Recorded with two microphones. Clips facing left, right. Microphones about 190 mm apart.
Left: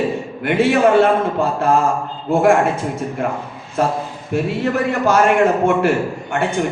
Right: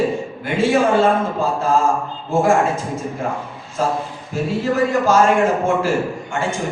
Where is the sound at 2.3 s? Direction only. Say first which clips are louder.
Left 2 dB; 65° left (ahead or behind).